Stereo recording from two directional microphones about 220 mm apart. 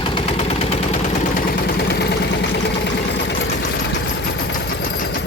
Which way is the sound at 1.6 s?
45° left (ahead or behind).